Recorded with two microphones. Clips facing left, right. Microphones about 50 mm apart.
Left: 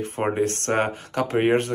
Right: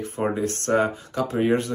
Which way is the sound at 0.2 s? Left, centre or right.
Left.